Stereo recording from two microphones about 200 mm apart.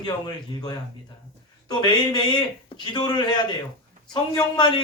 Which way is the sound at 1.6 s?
20° left (ahead or behind).